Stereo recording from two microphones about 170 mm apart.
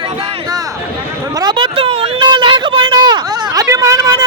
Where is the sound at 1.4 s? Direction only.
25° right (ahead or behind).